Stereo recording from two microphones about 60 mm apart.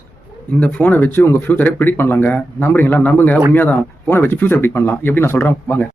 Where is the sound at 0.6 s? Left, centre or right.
Left.